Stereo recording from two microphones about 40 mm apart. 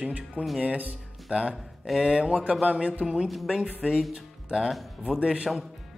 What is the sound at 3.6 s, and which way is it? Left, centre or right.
Speech, right.